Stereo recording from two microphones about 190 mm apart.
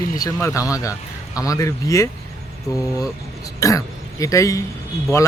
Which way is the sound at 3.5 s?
15° left (ahead or behind).